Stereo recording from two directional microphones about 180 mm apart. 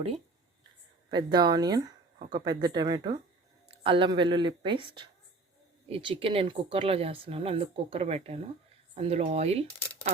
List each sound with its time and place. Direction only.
1.1 s speech: 25° right (ahead or behind)
5.9 s speech: 30° right (ahead or behind)